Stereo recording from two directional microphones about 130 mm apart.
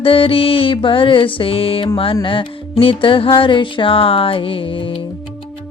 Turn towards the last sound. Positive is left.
turn(degrees=40)  # may be behind; listen again after turning